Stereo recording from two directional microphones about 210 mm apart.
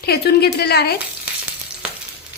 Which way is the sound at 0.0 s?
50° left (ahead or behind).